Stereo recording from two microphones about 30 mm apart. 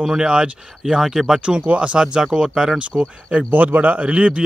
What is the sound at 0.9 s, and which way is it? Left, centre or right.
Speech, centre.